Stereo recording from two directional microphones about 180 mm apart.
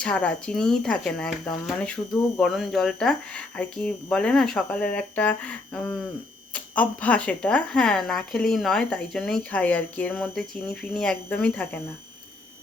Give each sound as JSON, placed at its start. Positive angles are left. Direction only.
{"t": 0.0, "sound": "speech", "side_deg": 5}